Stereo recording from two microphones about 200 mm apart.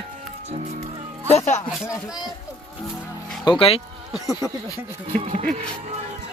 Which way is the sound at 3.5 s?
20° left (ahead or behind).